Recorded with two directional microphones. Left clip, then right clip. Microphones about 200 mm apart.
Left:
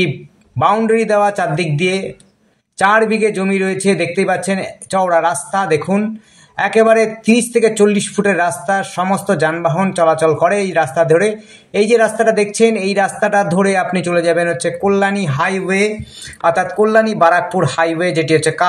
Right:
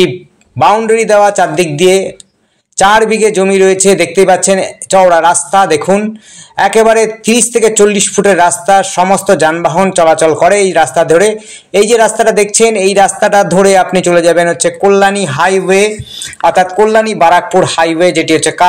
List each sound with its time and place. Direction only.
0.6 s a man's voice: 20° right (ahead or behind)